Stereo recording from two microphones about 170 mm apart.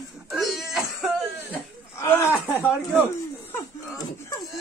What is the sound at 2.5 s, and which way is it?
Speech, 10° right (ahead or behind).